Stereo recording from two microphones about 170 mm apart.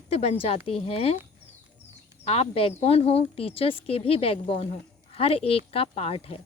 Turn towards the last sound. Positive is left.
turn(degrees=35)  # may be behind; listen again after turning